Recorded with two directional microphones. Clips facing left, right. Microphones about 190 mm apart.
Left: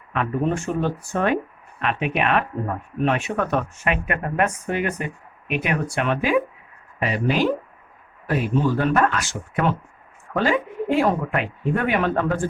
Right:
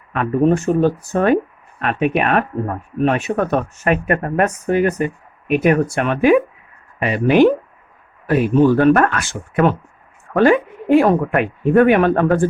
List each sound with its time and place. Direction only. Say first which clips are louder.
0.1 s speech: right 7 dB; 45° right (ahead or behind)
7.0 s speech: right 9 dB; 60° right (ahead or behind)